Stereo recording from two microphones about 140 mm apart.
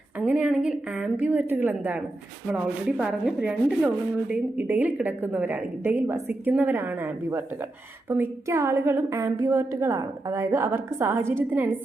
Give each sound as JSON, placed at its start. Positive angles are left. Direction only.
{"t": 0.2, "sound": "a woman's voice", "side_deg": -10}